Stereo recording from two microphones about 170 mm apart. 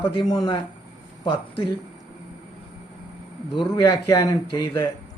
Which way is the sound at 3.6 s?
20° left (ahead or behind).